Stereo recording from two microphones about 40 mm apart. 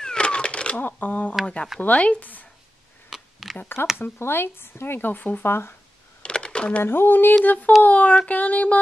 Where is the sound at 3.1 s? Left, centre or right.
Centre.